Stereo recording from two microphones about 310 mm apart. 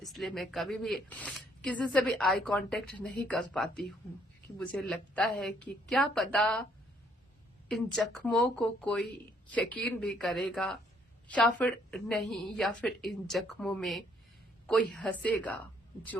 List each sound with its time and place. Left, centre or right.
0.0 s speech: centre
7.7 s speech: centre